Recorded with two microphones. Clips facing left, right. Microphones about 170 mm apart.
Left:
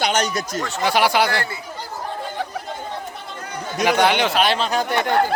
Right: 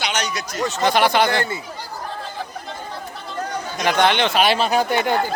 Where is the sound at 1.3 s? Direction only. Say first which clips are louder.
Right 3 dB; 20° right (ahead or behind).